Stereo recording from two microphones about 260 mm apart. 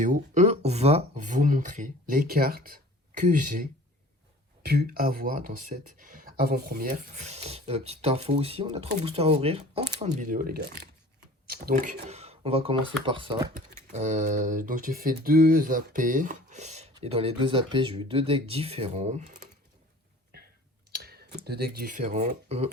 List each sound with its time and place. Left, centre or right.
0.0 s speech: right
20.9 s speech: right